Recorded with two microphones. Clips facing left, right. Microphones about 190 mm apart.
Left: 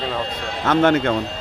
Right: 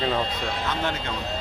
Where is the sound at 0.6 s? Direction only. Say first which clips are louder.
Left 16 dB; 75° left (ahead or behind).